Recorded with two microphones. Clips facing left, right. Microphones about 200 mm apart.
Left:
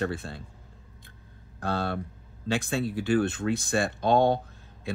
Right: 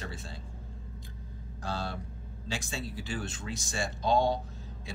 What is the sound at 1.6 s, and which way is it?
Speech, 60° left (ahead or behind).